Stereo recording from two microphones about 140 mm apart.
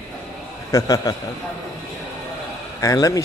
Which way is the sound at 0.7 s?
25° left (ahead or behind).